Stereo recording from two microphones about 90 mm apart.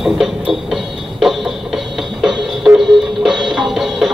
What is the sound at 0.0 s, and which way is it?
Music, 5° right (ahead or behind).